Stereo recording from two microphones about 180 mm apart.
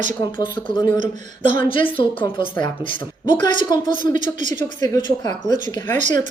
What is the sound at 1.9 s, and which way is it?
Speech, 30° left (ahead or behind).